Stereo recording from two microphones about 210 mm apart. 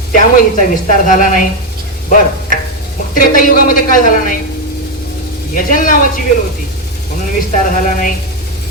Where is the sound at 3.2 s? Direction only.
40° left (ahead or behind).